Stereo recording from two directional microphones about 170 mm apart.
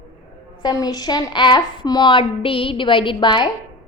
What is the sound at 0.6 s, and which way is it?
A woman's voice, 25° left (ahead or behind).